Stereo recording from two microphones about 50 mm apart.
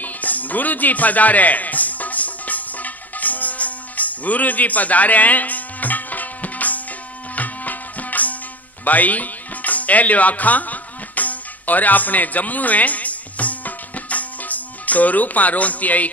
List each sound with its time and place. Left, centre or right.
0.0 s music: left